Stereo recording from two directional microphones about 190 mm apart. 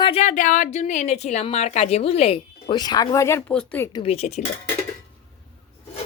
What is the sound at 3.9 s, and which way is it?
Speech, 30° left (ahead or behind).